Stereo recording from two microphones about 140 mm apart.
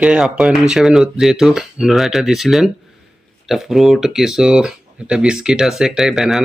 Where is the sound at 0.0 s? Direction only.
5° right (ahead or behind).